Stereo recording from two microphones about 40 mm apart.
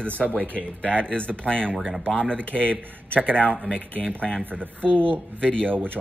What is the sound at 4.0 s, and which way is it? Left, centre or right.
Speech, centre.